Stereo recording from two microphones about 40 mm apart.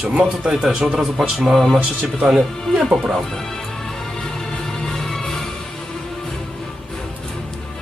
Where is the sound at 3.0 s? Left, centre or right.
Centre.